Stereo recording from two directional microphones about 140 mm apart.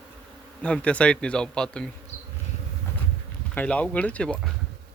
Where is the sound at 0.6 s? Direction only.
10° left (ahead or behind).